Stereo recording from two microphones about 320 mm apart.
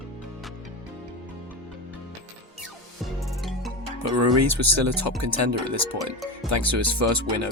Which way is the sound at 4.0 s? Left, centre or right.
Right.